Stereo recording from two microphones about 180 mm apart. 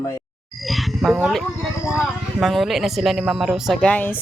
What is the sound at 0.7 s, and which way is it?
Speech, centre (ahead or behind).